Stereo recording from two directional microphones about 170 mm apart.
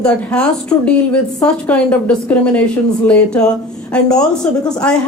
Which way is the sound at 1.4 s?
5° left (ahead or behind).